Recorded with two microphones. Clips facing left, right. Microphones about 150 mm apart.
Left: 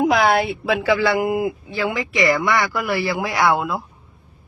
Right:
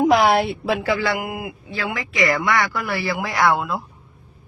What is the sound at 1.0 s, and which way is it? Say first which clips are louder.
Speech: left 6 dB; 30° left (ahead or behind).